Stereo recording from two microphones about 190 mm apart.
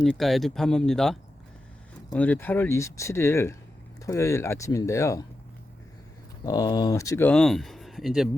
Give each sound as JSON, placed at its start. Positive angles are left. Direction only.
{"t": 0.0, "sound": "speech", "side_deg": 0}
{"t": 6.4, "sound": "speech", "side_deg": 20}